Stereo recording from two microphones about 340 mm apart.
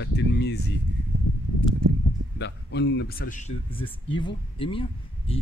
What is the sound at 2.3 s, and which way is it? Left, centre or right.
Speech, left.